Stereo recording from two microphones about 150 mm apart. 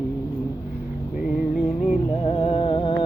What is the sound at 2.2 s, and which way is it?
Speech, 35° left (ahead or behind).